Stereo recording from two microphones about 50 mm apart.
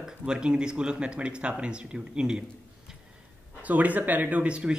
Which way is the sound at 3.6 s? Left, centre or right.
Right.